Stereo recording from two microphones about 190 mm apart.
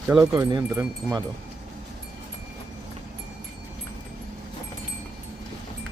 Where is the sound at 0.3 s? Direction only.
20° right (ahead or behind).